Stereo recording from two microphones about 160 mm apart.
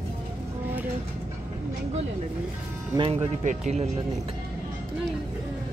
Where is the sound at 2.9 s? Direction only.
35° right (ahead or behind).